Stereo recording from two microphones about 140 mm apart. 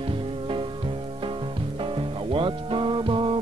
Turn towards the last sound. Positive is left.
turn(degrees=-35)  # may be behind; listen again after turning